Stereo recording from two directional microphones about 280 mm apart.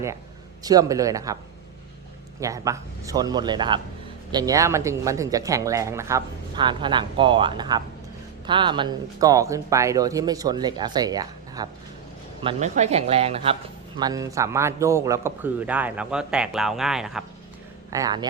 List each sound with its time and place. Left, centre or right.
0.6 s speech: centre
2.4 s speech: centre
17.9 s speech: centre